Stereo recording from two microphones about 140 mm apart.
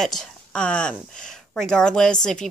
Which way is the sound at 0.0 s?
5° left (ahead or behind).